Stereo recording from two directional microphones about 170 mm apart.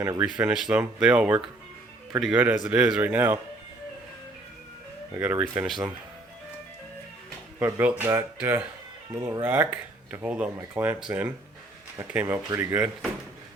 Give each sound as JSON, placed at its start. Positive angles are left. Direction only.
{"t": 0.2, "sound": "speech", "side_deg": -5}
{"t": 5.1, "sound": "speech", "side_deg": -10}
{"t": 7.6, "sound": "speech", "side_deg": -10}
{"t": 11.9, "sound": "speech", "side_deg": -10}